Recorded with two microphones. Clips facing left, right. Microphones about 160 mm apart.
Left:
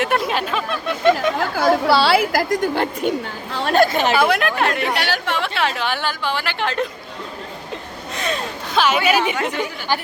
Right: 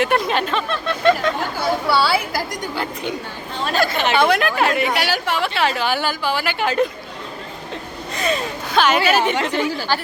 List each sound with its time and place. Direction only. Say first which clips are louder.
0.0 s speech: right 1 dB; 5° left (ahead or behind)
1.4 s a woman's voice: left 4 dB; 90° left
2.6 s a woman's voice: left 6 dB; 50° left (ahead or behind)
3.5 s speech: left 3 dB; 70° left (ahead or behind)
3.8 s a woman's voice: left 4 dB; 45° left (ahead or behind)
4.1 s a woman's voice: right 1 dB; 5° left (ahead or behind)
8.1 s a woman's voice: right 3 dB; centre (ahead or behind)